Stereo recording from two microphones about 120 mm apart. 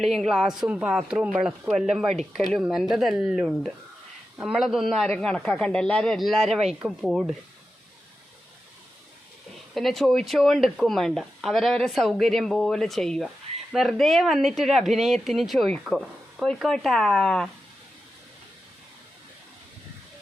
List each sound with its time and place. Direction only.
0.0 s speech: centre (ahead or behind)
9.7 s speech: centre (ahead or behind)